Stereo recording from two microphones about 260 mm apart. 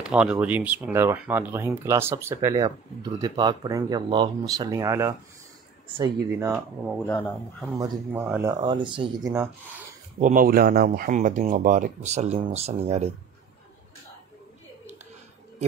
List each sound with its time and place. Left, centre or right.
0.0 s speech: centre
7.1 s speech: centre
7.8 s speech: centre
10.2 s speech: right